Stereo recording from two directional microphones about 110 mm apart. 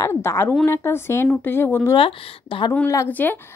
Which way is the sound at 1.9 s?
50° left (ahead or behind).